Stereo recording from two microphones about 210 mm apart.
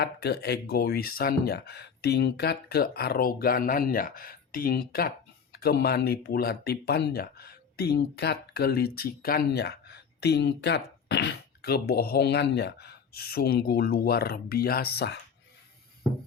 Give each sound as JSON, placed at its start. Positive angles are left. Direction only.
{"t": 0.0, "sound": "speech", "side_deg": 50}